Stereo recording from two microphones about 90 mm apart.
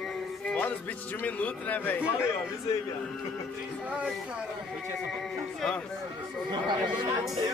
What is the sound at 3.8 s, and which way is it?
Speech, 15° right (ahead or behind).